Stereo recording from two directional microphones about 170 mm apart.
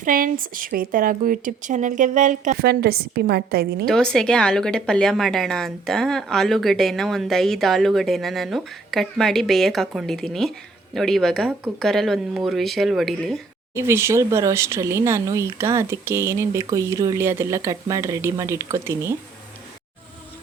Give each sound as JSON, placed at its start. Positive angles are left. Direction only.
{"t": 0.0, "sound": "speech", "side_deg": -55}
{"t": 2.6, "sound": "a woman's voice", "side_deg": -65}
{"t": 3.8, "sound": "a woman's voice", "side_deg": 5}
{"t": 13.7, "sound": "speech", "side_deg": -15}